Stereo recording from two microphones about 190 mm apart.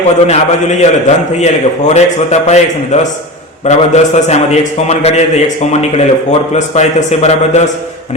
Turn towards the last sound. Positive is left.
turn(degrees=35)  # may be behind; listen again after turning